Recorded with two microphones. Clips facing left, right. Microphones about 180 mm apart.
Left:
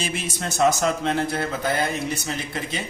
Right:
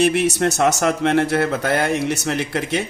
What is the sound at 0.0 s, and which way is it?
A man's voice, 70° right (ahead or behind).